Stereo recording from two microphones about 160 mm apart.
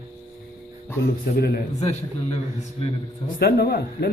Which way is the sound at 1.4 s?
85° left.